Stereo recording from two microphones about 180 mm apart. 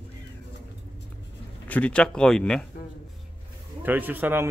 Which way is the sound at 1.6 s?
5° left (ahead or behind).